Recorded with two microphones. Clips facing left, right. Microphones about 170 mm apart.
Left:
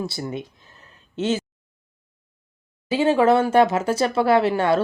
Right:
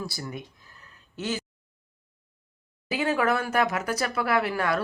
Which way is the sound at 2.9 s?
25° left (ahead or behind).